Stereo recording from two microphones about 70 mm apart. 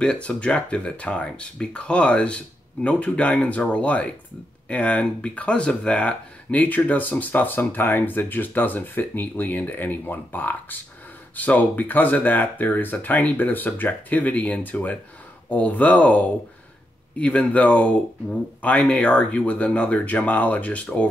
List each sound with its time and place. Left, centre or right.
0.0 s speech: centre